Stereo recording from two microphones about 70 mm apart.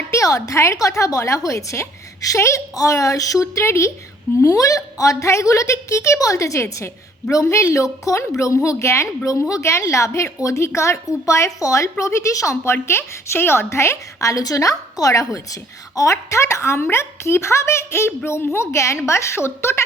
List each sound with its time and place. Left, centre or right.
0.1 s a woman's voice: left
4.4 s a woman's voice: left
12.7 s a woman's voice: left